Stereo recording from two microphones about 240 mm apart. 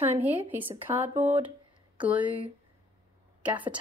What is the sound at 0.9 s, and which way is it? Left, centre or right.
Speech, centre.